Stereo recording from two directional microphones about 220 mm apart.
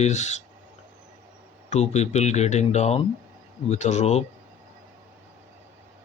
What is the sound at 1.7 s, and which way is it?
Speech, 30° left (ahead or behind).